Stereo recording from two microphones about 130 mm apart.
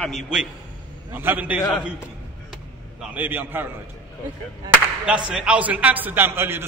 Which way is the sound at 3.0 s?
15° right (ahead or behind).